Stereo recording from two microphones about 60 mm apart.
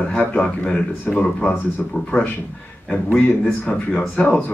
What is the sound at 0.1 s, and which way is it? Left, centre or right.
A man's voice, left.